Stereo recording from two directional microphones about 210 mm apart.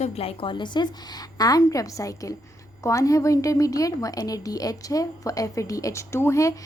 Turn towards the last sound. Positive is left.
turn(degrees=15)  # may be behind; listen again after turning